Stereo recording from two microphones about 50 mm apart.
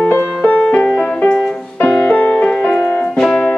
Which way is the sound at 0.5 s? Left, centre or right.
Left.